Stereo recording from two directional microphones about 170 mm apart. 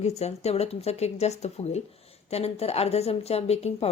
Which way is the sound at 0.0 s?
40° left (ahead or behind).